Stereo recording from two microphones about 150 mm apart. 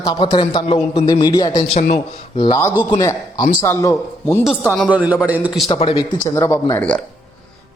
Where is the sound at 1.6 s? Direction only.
45° left (ahead or behind).